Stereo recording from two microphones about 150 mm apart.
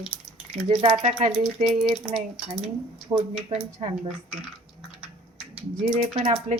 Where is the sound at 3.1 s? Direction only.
25° right (ahead or behind).